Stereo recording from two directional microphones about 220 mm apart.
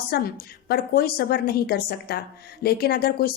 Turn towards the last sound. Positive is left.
turn(degrees=45)  # may be behind; listen again after turning